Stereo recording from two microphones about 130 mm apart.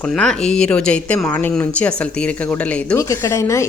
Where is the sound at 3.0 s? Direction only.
20° left (ahead or behind).